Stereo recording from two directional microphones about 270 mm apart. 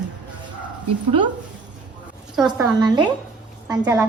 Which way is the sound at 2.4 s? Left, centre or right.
Centre.